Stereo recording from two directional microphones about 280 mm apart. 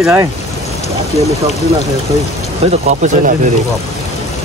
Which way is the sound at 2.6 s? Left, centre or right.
Right.